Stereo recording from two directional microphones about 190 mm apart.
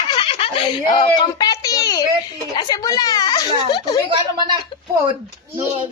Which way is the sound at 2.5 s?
20° left (ahead or behind).